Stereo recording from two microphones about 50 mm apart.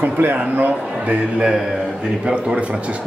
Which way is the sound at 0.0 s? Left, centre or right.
Right.